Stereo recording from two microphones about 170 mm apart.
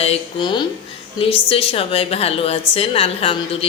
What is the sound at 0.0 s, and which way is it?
Speech, 30° left (ahead or behind).